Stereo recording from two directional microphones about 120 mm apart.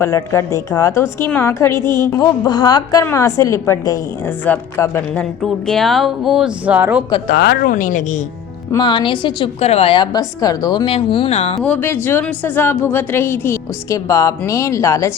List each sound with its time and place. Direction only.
0.0 s a woman's voice: 25° left (ahead or behind)
4.3 s a woman's voice: 15° left (ahead or behind)
5.4 s speech: centre (ahead or behind)
7.7 s a woman's voice: 90° left
8.8 s a woman's voice: 40° left (ahead or behind)
9.6 s a woman's voice: 60° left (ahead or behind); by 10.8 s 35° left (ahead or behind)
10.8 s speech: 45° left (ahead or behind)
11.3 s speech: 65° left (ahead or behind)
11.6 s a woman's voice: 15° left (ahead or behind)